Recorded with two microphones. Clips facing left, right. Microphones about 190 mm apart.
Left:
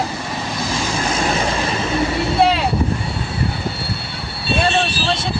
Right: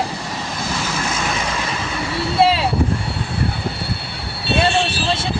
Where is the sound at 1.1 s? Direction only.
35° left (ahead or behind).